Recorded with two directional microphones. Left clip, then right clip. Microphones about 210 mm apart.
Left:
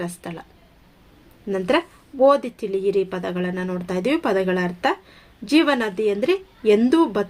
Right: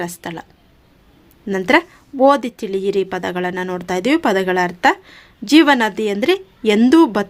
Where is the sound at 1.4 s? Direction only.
40° right (ahead or behind).